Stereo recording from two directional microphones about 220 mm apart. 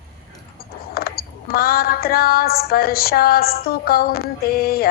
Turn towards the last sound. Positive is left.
turn(degrees=45)  # may be behind; listen again after turning